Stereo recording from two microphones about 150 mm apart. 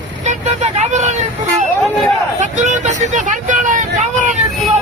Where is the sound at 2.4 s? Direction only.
55° right (ahead or behind).